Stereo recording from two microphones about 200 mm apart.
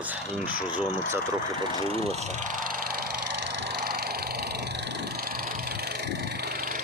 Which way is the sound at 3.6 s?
55° right (ahead or behind).